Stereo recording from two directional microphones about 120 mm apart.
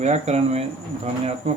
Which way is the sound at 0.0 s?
65° right (ahead or behind).